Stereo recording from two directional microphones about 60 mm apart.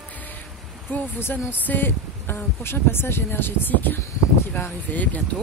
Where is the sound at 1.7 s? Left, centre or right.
Left.